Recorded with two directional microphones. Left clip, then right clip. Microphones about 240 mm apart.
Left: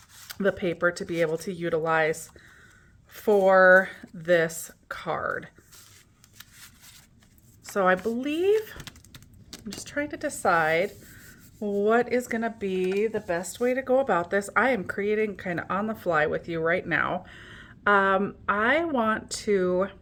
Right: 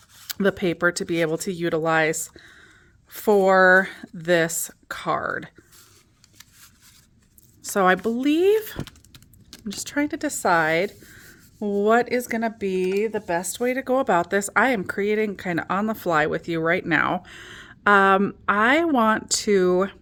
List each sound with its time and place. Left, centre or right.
0.3 s speech: right
7.6 s speech: right
8.8 s keys jangling: centre
9.7 s speech: right